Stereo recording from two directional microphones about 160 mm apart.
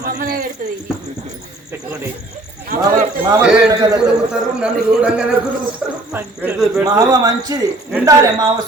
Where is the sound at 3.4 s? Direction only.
5° right (ahead or behind).